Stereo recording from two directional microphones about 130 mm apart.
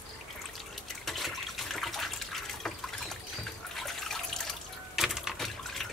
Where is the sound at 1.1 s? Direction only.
Centre (ahead or behind).